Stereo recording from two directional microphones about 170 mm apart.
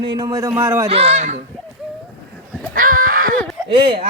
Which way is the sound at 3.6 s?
30° right (ahead or behind).